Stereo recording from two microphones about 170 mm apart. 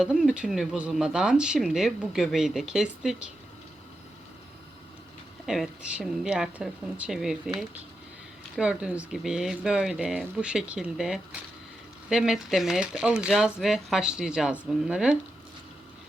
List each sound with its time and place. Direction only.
0.0 s speech: 5° right (ahead or behind)
5.5 s speech: 5° right (ahead or behind)
8.5 s speech: 5° right (ahead or behind)